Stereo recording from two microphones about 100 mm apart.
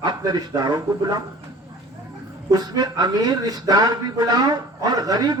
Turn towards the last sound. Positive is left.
turn(degrees=-40)  # may be behind; listen again after turning